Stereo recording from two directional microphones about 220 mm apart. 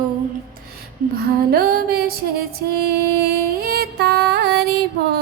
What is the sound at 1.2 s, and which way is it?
Music, 45° right (ahead or behind).